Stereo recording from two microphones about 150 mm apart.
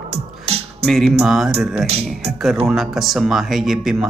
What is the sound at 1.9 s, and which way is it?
Speech, 40° right (ahead or behind).